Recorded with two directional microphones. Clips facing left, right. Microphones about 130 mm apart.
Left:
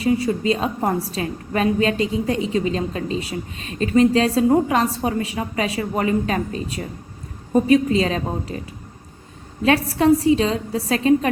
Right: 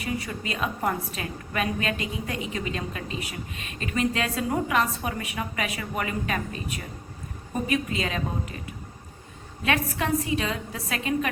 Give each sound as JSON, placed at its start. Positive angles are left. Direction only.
{"t": 0.0, "sound": "a woman's voice", "side_deg": 30}
{"t": 9.6, "sound": "a woman's voice", "side_deg": 35}